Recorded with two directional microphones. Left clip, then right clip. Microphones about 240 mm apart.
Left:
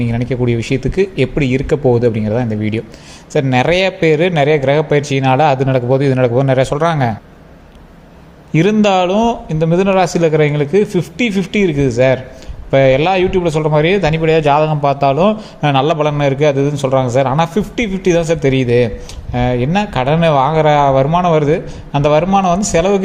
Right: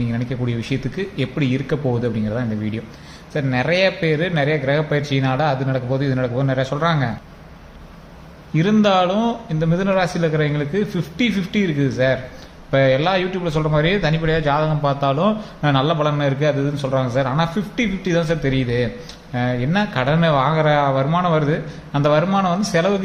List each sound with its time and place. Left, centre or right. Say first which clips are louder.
0.0 s a man's voice: left 8 dB; left
8.5 s a man's voice: left 5 dB; left